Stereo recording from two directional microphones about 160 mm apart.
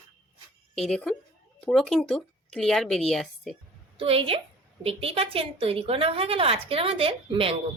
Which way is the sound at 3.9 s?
35° right (ahead or behind).